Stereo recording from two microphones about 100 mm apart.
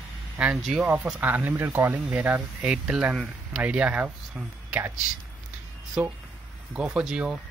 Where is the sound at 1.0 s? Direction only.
15° right (ahead or behind).